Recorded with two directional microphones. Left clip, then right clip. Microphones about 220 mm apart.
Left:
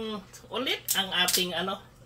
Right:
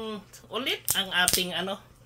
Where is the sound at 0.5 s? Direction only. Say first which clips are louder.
Even; 35° right (ahead or behind).